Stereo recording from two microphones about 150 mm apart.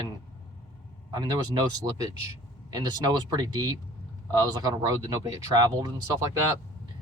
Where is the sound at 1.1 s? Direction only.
25° right (ahead or behind).